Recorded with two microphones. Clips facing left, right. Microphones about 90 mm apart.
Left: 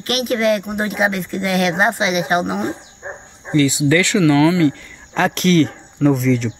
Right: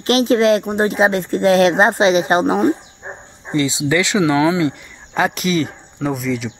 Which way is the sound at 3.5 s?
20° right (ahead or behind).